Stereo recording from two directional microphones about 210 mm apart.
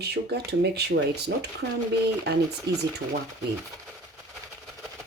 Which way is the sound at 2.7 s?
50° right (ahead or behind).